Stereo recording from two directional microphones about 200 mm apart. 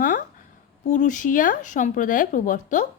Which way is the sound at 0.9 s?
40° left (ahead or behind).